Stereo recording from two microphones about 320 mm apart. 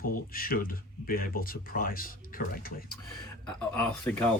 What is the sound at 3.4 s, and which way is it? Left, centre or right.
Speech, centre.